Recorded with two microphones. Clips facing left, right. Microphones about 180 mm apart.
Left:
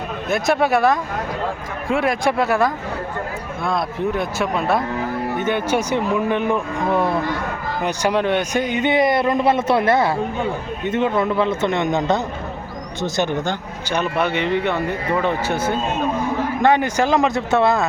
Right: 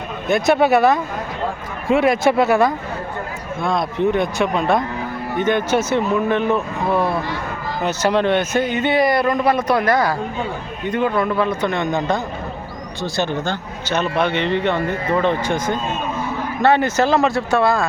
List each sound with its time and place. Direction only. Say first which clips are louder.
0.3 s a man's voice: right 3 dB; centre (ahead or behind); by 17.8 s 20° left (ahead or behind)